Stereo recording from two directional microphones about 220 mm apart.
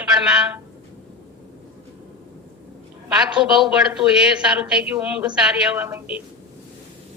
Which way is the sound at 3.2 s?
5° right (ahead or behind).